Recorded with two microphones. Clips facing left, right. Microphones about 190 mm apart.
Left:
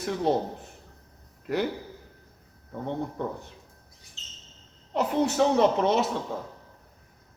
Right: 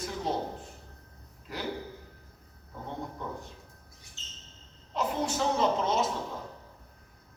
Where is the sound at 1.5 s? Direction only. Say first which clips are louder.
Left 12 dB; 65° left (ahead or behind).